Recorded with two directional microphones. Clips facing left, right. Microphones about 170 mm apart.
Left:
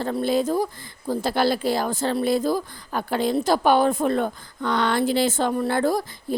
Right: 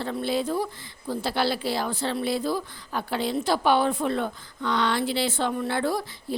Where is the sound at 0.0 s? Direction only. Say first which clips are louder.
Left 5 dB; 45° left (ahead or behind).